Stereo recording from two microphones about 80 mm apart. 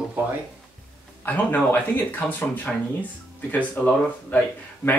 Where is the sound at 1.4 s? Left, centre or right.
Left.